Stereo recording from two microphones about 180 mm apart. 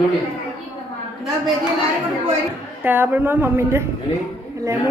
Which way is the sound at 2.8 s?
10° right (ahead or behind).